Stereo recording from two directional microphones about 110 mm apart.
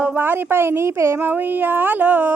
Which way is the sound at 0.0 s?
20° right (ahead or behind).